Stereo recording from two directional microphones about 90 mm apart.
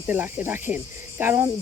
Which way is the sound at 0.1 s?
25° right (ahead or behind).